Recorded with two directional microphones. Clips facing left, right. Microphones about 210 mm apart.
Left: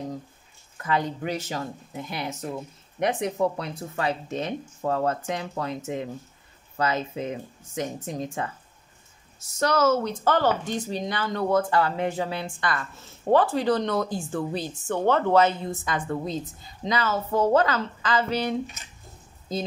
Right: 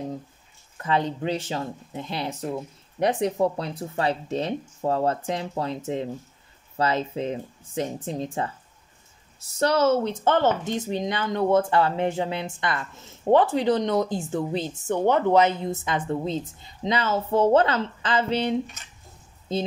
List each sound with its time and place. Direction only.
0.8 s speech: 25° right (ahead or behind)
6.8 s speech: 30° right (ahead or behind)
9.6 s speech: 30° right (ahead or behind)
19.5 s speech: 25° right (ahead or behind)